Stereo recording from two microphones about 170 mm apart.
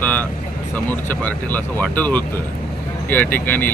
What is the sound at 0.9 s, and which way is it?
Speech, 10° left (ahead or behind).